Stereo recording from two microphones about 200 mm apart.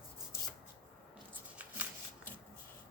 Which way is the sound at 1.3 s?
10° right (ahead or behind).